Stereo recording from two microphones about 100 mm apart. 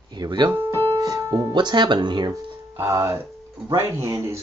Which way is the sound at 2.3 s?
30° right (ahead or behind).